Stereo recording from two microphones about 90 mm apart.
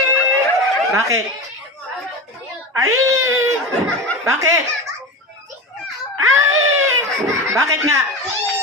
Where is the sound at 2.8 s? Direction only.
35° right (ahead or behind).